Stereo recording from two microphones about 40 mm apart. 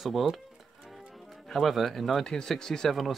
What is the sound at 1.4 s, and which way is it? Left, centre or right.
Speech, centre.